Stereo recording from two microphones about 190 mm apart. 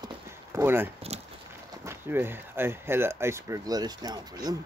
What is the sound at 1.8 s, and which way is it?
Speech, 10° right (ahead or behind).